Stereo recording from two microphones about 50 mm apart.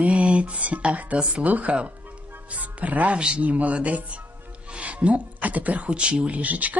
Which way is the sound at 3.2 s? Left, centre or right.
Centre.